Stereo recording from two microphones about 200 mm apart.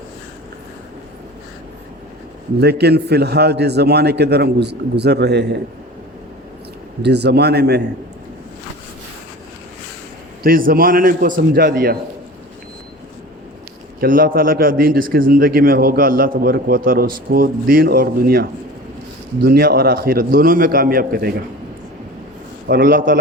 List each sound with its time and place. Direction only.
2.6 s a man's voice: 55° right (ahead or behind)
7.0 s a man's voice: 55° right (ahead or behind)
10.4 s a man's voice: 45° right (ahead or behind)
14.0 s a man's voice: 45° right (ahead or behind)
19.5 s a man's voice: 50° right (ahead or behind)
22.7 s a man's voice: 45° right (ahead or behind)